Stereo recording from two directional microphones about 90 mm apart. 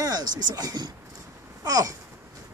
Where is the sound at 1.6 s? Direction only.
45° right (ahead or behind).